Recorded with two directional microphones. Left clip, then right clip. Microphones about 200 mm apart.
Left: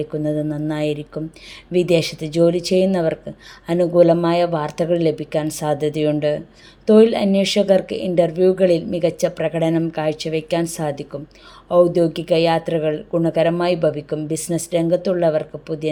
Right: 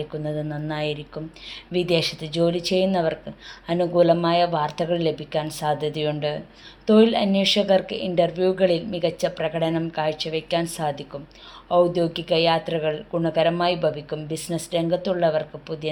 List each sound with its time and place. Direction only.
0.0 s speech: 50° left (ahead or behind)